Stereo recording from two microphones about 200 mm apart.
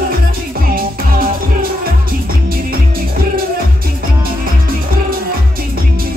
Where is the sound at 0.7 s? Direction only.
45° right (ahead or behind).